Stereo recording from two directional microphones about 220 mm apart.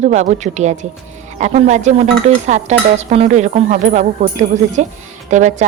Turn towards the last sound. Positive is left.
turn(degrees=-30)  # may be behind; listen again after turning